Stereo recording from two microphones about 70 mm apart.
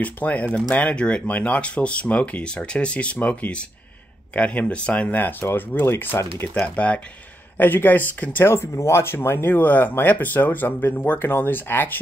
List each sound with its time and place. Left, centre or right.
0.0 s speech: left
6.1 s speech: left
6.6 s speech: centre
7.5 s speech: left
8.7 s speech: left